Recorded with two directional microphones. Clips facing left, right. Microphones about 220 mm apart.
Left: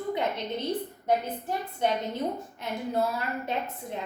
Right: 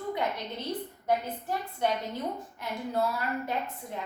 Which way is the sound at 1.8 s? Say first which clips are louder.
Left 3 dB; 20° left (ahead or behind).